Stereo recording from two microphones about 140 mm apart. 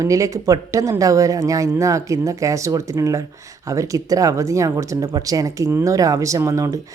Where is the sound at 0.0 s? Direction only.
25° right (ahead or behind).